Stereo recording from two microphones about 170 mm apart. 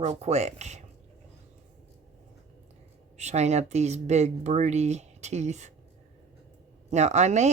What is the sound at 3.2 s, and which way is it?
Speech, 40° right (ahead or behind).